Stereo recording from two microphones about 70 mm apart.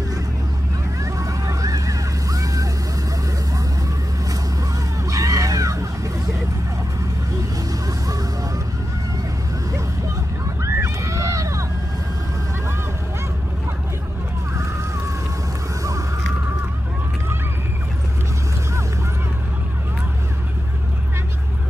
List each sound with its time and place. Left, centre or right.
1.0 s vehicle: right
5.1 s music: right
10.6 s a sound: right